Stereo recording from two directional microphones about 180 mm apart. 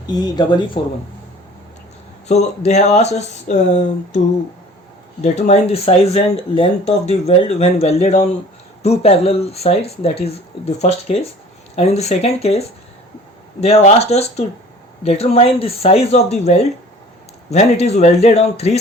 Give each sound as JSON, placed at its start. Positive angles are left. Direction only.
{"t": 0.1, "sound": "speech", "side_deg": 20}
{"t": 2.2, "sound": "speech", "side_deg": 40}
{"t": 5.2, "sound": "speech", "side_deg": 40}